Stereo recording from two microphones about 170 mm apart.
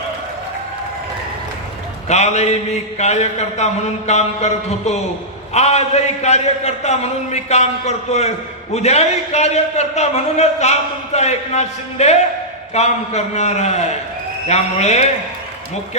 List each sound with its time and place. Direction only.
2.0 s a man's voice: 40° left (ahead or behind)